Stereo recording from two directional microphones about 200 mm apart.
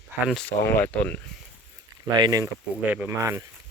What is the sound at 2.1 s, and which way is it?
Speech, 20° right (ahead or behind).